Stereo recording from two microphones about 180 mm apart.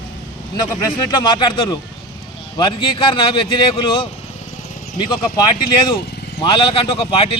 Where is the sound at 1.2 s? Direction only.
25° left (ahead or behind).